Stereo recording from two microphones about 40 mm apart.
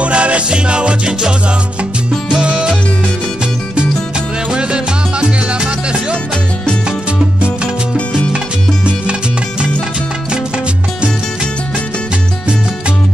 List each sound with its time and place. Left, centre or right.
0.0 s music: right
4.5 s music: right